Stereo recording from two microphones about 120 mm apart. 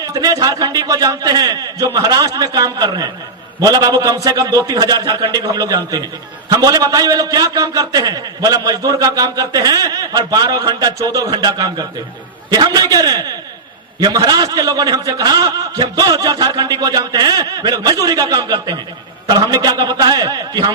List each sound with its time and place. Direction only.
0.0 s a man's voice: 30° right (ahead or behind)